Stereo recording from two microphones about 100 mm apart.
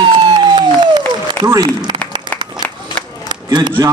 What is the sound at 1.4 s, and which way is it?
Speech, 35° right (ahead or behind).